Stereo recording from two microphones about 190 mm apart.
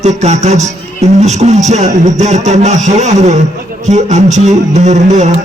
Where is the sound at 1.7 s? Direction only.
40° right (ahead or behind).